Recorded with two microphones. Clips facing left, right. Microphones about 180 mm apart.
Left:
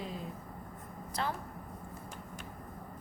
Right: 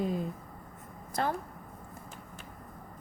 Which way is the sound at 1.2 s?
50° right (ahead or behind).